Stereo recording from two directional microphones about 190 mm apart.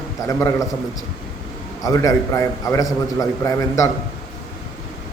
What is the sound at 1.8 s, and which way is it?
A man's voice, 15° left (ahead or behind).